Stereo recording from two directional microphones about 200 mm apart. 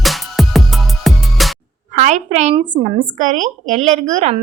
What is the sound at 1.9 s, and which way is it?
A woman's voice, 35° right (ahead or behind).